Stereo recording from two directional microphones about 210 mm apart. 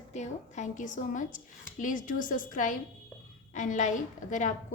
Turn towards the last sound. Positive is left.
turn(degrees=35)  # may be behind; listen again after turning